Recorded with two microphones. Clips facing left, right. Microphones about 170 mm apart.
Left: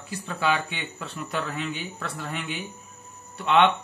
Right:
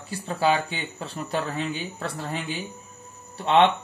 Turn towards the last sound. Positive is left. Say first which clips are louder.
# right 2 dB
turn(degrees=-35)  # may be behind; listen again after turning